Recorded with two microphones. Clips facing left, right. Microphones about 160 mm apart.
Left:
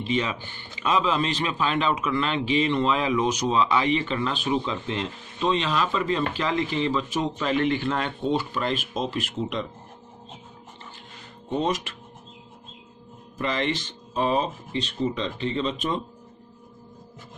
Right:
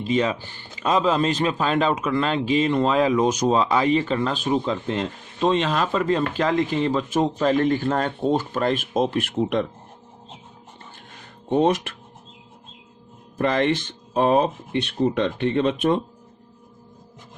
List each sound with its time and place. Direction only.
0.0 s a man's voice: 40° right (ahead or behind); by 9.6 s 55° right (ahead or behind)
11.4 s speech: 60° right (ahead or behind)
13.4 s speech: 50° right (ahead or behind)